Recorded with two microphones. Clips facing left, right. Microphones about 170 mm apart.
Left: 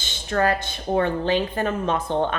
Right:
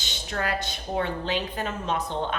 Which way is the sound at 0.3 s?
50° left (ahead or behind).